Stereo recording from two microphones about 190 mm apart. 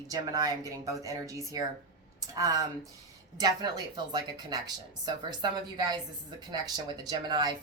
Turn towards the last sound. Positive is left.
turn(degrees=-20)  # may be behind; listen again after turning